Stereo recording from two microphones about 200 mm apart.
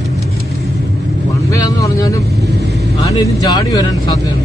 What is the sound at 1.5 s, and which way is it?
Vehicle, 15° left (ahead or behind).